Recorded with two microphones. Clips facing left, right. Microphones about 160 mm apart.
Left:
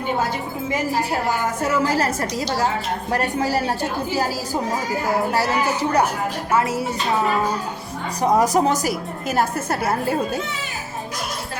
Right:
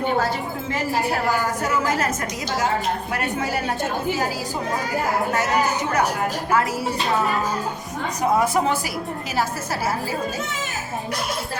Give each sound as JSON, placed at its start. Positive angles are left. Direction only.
{"t": 1.8, "sound": "speech", "side_deg": 30}
{"t": 6.5, "sound": "a woman's voice", "side_deg": 25}
{"t": 8.4, "sound": "a woman's voice", "side_deg": 40}
{"t": 9.3, "sound": "a woman's voice", "side_deg": 55}